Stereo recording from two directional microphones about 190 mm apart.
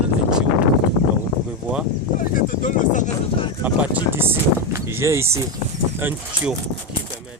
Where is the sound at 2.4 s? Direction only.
45° left (ahead or behind).